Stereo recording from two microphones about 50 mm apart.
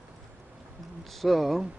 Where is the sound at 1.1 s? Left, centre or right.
Centre.